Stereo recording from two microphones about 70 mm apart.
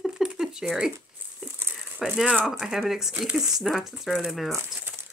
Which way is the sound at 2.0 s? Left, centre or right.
Centre.